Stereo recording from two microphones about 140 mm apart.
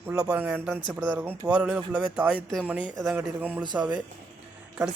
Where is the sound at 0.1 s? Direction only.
10° right (ahead or behind).